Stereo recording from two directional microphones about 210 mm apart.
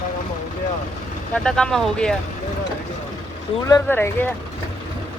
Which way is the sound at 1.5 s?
5° left (ahead or behind).